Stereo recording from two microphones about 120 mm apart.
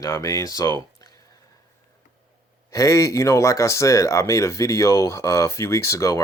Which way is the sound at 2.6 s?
25° left (ahead or behind).